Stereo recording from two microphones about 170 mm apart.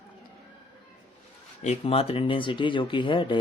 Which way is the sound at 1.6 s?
35° left (ahead or behind).